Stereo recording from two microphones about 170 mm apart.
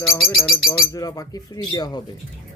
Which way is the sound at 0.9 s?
20° left (ahead or behind).